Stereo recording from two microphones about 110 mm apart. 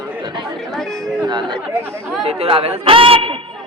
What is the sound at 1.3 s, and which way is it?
Speech, 45° right (ahead or behind).